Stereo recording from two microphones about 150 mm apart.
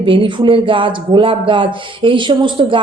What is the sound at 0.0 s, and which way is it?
A woman's voice, 35° right (ahead or behind).